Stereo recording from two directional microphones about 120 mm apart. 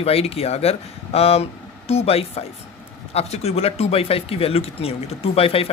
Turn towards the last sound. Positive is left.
turn(degrees=55)  # may be behind; listen again after turning